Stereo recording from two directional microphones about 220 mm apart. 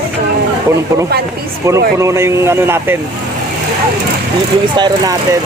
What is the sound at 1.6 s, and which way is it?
Speech, 10° right (ahead or behind).